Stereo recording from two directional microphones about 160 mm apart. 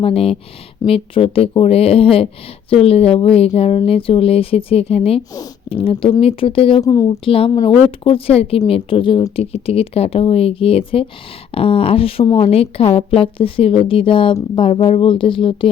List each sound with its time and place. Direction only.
0.0 s a woman's voice: 35° left (ahead or behind)
6.8 s a woman's voice: 20° left (ahead or behind)
7.3 s a woman's voice: 35° left (ahead or behind)